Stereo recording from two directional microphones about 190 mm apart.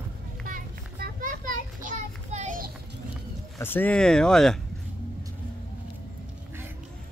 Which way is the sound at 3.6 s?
10° left (ahead or behind).